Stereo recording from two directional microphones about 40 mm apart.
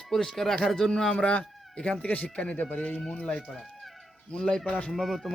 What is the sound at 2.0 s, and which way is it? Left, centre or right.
Speech, left.